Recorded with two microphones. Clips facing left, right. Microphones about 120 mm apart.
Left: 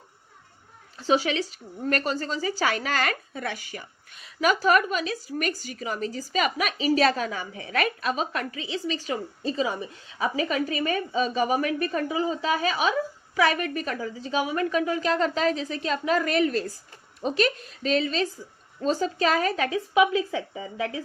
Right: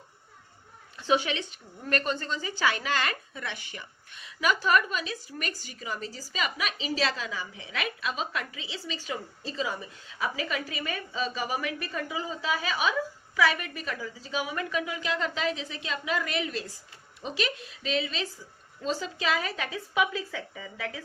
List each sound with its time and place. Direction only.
0.9 s a woman's voice: 35° left (ahead or behind)
10.2 s a woman's voice: 40° left (ahead or behind)
19.7 s a woman's voice: 20° left (ahead or behind)